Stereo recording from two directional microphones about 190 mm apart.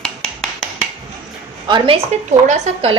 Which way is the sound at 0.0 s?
5° left (ahead or behind).